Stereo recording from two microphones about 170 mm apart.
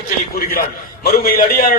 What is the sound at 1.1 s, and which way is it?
Speech, 55° left (ahead or behind).